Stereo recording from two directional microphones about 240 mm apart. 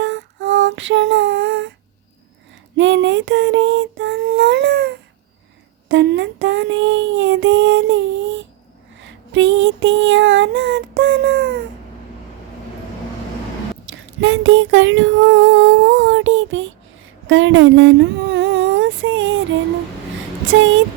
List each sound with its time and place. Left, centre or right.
0.0 s female singing: right
2.7 s child singing: right
9.0 s female singing: right
13.9 s a sound: right
20.5 s speech: right